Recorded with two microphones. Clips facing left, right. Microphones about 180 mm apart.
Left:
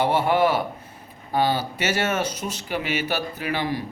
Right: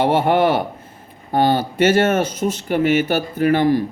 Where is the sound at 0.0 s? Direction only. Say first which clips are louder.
Right 4 dB; 55° right (ahead or behind).